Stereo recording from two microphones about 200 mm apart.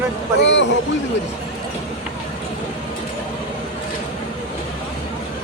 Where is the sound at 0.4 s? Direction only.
65° left (ahead or behind).